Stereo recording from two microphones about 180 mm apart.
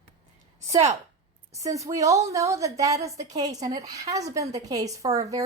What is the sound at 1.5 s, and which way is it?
A woman's voice, 20° right (ahead or behind).